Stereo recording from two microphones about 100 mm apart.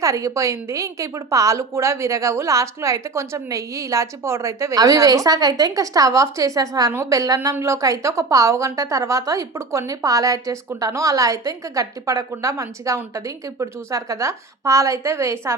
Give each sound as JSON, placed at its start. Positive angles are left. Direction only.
{"t": 0.0, "sound": "a woman's voice", "side_deg": -35}